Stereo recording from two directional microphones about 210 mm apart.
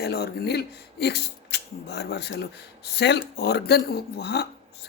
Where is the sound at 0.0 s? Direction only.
50° left (ahead or behind).